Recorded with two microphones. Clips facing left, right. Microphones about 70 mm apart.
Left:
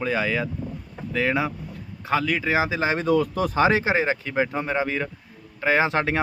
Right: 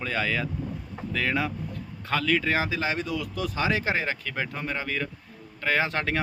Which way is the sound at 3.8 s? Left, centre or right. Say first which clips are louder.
Left 5 dB; centre.